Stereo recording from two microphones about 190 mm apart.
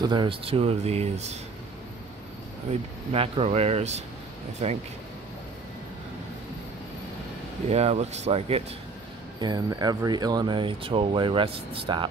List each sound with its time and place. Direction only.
0.0 s speech: 25° right (ahead or behind)
2.7 s speech: 30° right (ahead or behind)
7.7 s speech: 35° right (ahead or behind)
9.4 s speech: 20° right (ahead or behind)